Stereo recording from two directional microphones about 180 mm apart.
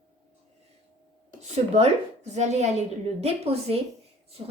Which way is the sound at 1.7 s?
40° right (ahead or behind).